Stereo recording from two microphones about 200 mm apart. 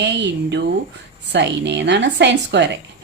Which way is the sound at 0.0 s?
60° right (ahead or behind).